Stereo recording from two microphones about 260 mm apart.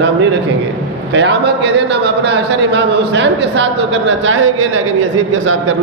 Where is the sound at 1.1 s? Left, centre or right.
Right.